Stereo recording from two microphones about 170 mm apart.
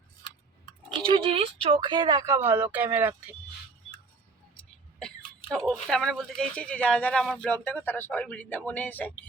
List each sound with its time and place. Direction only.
0.9 s speech: 30° right (ahead or behind); by 3.3 s 10° right (ahead or behind)
4.9 s throat clearing: 5° left (ahead or behind)
5.6 s speech: 5° left (ahead or behind)